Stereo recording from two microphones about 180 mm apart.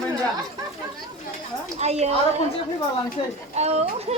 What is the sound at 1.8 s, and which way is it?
Speech, 35° right (ahead or behind).